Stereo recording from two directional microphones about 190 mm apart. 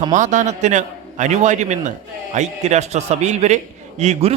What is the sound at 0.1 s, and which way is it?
A man's voice, 40° right (ahead or behind).